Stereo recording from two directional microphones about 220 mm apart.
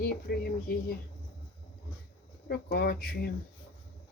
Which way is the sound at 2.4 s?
45° left (ahead or behind).